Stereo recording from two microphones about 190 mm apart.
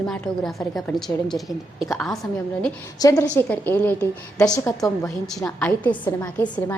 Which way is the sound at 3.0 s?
20° left (ahead or behind).